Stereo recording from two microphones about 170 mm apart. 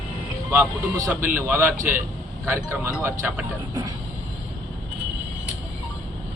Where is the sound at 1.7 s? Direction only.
55° right (ahead or behind).